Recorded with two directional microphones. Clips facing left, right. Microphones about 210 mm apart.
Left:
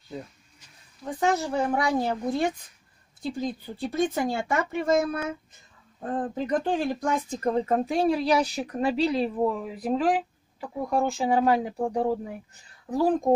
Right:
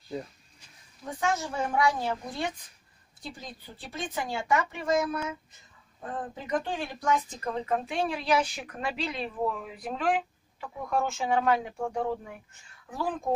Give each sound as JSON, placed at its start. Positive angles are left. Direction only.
{"t": 1.2, "sound": "speech", "side_deg": 35}
{"t": 3.8, "sound": "speech", "side_deg": 40}